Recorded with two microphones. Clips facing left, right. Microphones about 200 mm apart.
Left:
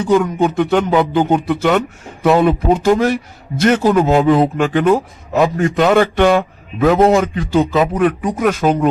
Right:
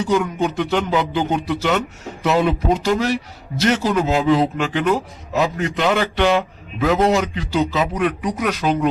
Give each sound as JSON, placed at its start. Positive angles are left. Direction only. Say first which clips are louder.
{"t": 0.0, "sound": "a man's voice", "louder": "left 5 dB", "side_deg": 55}